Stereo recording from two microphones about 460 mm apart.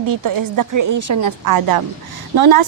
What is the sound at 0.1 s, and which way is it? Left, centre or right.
A woman's voice, right.